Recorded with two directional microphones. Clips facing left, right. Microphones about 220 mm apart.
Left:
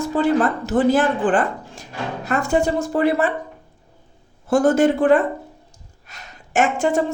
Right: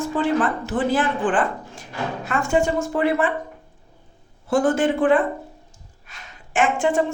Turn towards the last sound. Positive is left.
turn(degrees=40)  # may be behind; listen again after turning